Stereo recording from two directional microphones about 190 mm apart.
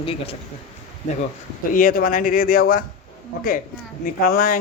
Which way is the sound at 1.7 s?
45° left (ahead or behind).